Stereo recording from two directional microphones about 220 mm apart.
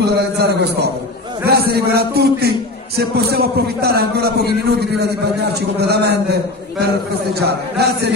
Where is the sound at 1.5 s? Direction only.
45° right (ahead or behind).